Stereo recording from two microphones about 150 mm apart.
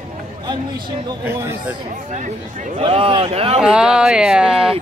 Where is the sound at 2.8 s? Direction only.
40° right (ahead or behind).